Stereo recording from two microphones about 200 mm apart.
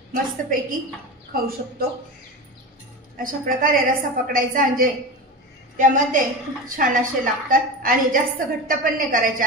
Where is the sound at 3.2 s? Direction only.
45° right (ahead or behind).